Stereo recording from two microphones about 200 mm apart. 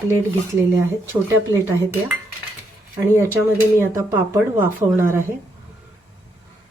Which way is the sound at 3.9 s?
15° right (ahead or behind).